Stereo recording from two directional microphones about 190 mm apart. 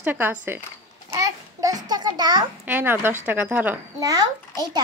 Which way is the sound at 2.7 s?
10° right (ahead or behind).